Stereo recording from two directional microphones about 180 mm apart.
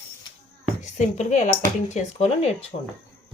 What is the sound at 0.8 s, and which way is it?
Speech, 40° left (ahead or behind).